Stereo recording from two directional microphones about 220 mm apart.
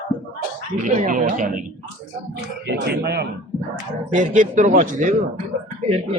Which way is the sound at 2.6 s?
50° right (ahead or behind).